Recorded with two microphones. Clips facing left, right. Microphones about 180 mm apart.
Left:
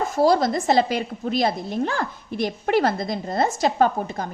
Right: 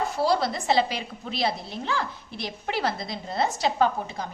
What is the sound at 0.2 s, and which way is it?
A woman's voice, 45° left (ahead or behind).